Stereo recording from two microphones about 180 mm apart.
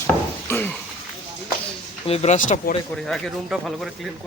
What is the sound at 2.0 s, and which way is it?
Speech, 35° left (ahead or behind).